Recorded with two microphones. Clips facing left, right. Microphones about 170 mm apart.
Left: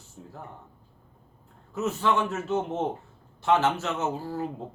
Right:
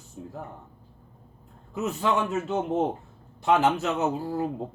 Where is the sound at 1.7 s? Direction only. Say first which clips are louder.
Even; 15° right (ahead or behind).